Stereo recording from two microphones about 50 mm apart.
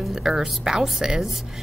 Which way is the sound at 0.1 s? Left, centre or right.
Centre.